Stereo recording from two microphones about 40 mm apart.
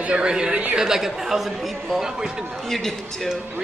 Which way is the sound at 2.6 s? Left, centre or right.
Centre.